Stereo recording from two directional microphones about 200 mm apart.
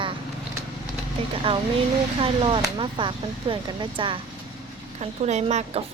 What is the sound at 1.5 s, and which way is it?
A woman's voice, 25° right (ahead or behind).